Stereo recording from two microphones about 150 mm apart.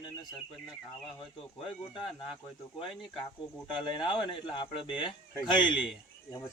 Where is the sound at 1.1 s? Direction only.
35° left (ahead or behind).